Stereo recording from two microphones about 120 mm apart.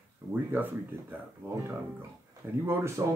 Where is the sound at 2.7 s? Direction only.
25° right (ahead or behind).